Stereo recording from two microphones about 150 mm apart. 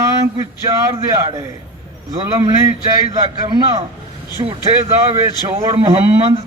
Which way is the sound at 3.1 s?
45° right (ahead or behind).